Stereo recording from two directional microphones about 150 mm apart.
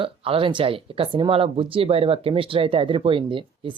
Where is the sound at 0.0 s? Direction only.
35° right (ahead or behind).